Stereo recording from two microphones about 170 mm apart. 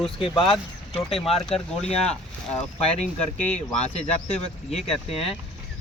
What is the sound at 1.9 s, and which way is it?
Speech, 40° left (ahead or behind).